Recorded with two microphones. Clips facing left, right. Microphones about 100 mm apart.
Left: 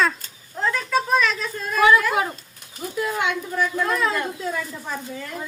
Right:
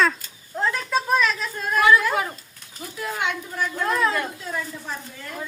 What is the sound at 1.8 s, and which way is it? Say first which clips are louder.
Speech: left 1 dB; 20° left (ahead or behind).